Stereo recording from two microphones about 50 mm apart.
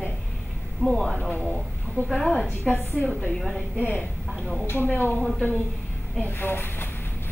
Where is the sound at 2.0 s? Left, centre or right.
Right.